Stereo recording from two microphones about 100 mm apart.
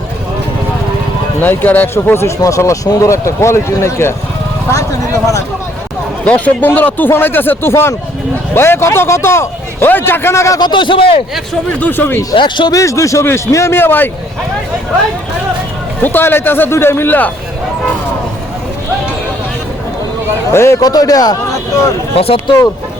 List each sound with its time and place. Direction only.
1.4 s speech: 20° left (ahead or behind)
6.2 s speech: 15° left (ahead or behind)
10.6 s a man's voice: 55° left (ahead or behind)
11.8 s speech: 20° left (ahead or behind)
12.3 s speech: 55° left (ahead or behind)
12.7 s speech: 30° left (ahead or behind)
16.0 s speech: 20° left (ahead or behind)
20.5 s speech: 25° left (ahead or behind)
20.8 s speech: 40° left (ahead or behind)
22.1 s speech: 75° left (ahead or behind)